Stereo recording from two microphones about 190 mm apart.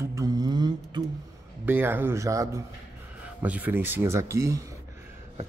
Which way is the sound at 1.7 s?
10° right (ahead or behind).